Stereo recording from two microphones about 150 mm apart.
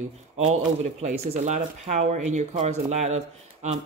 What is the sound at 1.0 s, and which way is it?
Speech, 50° right (ahead or behind).